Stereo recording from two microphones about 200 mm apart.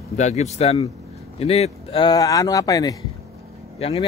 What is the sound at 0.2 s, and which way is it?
A man's voice, 35° left (ahead or behind).